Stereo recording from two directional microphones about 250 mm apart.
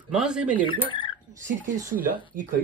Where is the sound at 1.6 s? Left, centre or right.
Right.